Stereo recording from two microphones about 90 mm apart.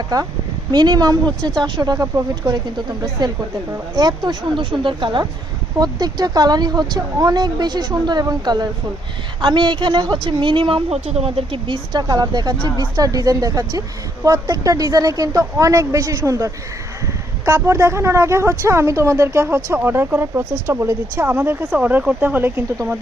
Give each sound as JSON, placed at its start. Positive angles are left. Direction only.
{"t": 0.7, "sound": "speech", "side_deg": -55}
{"t": 2.4, "sound": "speech", "side_deg": -25}
{"t": 3.0, "sound": "a woman's voice", "side_deg": -50}
{"t": 5.8, "sound": "speech", "side_deg": -45}
{"t": 9.4, "sound": "a woman's voice", "side_deg": -60}
{"t": 11.2, "sound": "speech", "side_deg": -85}
{"t": 11.9, "sound": "a woman's voice", "side_deg": -45}